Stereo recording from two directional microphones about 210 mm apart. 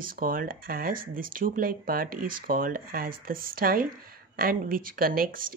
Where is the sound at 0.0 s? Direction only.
40° right (ahead or behind).